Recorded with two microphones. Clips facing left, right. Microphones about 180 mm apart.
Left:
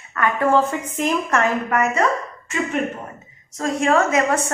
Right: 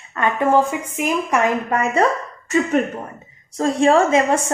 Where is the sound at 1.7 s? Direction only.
30° right (ahead or behind).